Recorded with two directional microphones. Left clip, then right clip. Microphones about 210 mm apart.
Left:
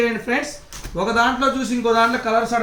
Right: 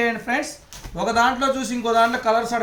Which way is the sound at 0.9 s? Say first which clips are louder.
Left 1 dB; 45° right (ahead or behind).